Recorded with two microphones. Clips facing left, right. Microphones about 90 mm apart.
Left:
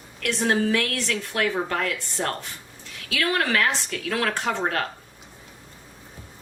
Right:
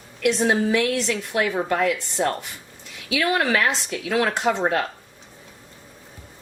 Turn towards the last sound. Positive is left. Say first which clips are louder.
# right 4 dB
turn(degrees=-15)  # may be behind; listen again after turning